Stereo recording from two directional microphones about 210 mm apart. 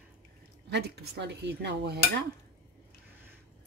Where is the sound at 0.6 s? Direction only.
50° right (ahead or behind).